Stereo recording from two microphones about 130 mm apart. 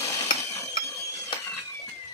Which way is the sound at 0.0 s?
20° left (ahead or behind).